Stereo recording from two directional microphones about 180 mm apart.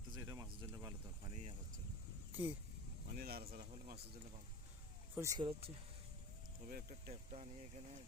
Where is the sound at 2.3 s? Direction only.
10° right (ahead or behind).